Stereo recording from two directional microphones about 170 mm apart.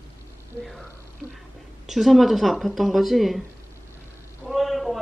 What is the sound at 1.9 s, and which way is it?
Speech, centre (ahead or behind).